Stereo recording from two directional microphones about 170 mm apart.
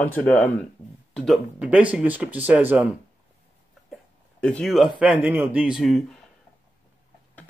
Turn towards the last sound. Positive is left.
turn(degrees=0)  # may be behind; listen again after turning